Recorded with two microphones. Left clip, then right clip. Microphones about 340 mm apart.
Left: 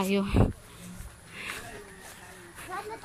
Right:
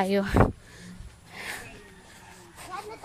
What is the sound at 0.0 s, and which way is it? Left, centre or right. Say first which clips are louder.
Speech: right 3 dB; right.